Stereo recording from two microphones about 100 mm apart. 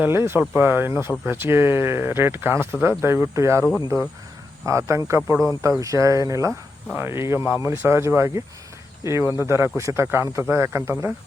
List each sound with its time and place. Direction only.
0.0 s speech: 25° right (ahead or behind)